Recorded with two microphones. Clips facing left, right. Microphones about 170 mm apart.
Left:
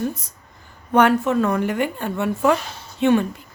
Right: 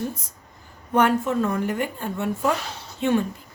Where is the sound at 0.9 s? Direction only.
75° left (ahead or behind).